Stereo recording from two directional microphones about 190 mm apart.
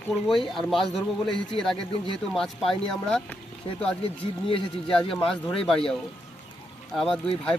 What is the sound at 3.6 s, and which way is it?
Speech, 25° left (ahead or behind).